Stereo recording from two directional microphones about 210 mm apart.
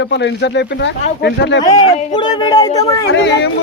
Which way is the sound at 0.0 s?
60° left (ahead or behind).